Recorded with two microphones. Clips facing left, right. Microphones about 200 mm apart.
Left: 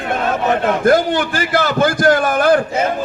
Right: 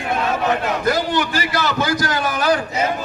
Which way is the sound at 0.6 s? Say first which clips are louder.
Left 6 dB; 50° left (ahead or behind).